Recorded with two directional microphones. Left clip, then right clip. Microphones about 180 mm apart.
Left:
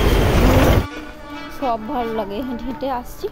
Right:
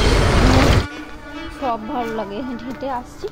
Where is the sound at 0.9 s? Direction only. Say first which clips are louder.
Even; centre (ahead or behind).